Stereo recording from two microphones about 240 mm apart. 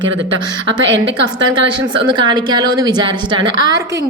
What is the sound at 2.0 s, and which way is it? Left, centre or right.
A woman's voice, centre.